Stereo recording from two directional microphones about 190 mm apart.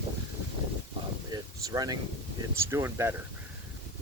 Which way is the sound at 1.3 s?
20° right (ahead or behind).